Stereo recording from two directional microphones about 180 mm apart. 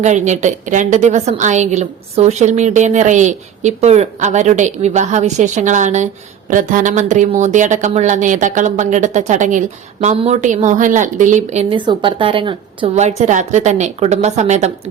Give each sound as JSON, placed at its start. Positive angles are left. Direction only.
{"t": 0.0, "sound": "a woman's voice", "side_deg": -40}
{"t": 11.7, "sound": "a woman's voice", "side_deg": -25}